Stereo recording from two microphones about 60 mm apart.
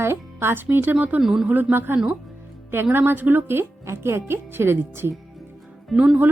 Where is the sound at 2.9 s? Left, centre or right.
Right.